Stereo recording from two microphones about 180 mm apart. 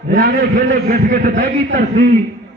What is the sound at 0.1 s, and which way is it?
A man's voice, 55° right (ahead or behind).